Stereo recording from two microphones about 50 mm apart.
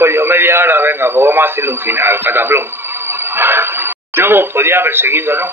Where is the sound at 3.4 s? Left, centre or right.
Right.